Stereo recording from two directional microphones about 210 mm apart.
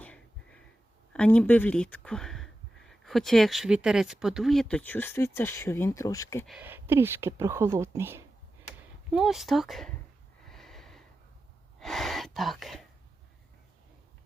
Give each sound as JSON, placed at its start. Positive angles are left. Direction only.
{"t": 0.0, "sound": "a sound", "side_deg": 5}
{"t": 1.1, "sound": "speech", "side_deg": 5}
{"t": 6.5, "sound": "speech", "side_deg": -10}
{"t": 9.1, "sound": "speech", "side_deg": 0}
{"t": 10.4, "sound": "snort", "side_deg": 0}
{"t": 11.8, "sound": "gasp", "side_deg": 0}